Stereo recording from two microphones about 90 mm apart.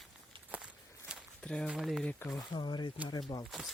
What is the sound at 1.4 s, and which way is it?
Speech, 10° left (ahead or behind).